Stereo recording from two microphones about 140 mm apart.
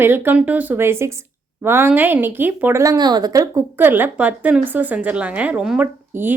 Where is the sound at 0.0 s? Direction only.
15° right (ahead or behind).